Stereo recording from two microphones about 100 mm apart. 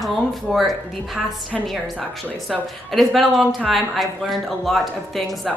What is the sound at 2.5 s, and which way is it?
A man's voice, centre (ahead or behind).